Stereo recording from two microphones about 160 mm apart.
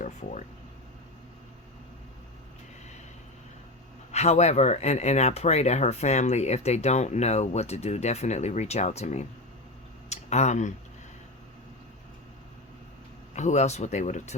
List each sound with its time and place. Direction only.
0.0 s a sound: 50° left (ahead or behind)
4.1 s speech: 45° left (ahead or behind)
13.3 s speech: 45° left (ahead or behind)